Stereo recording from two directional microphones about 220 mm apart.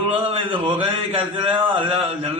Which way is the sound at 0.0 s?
25° right (ahead or behind).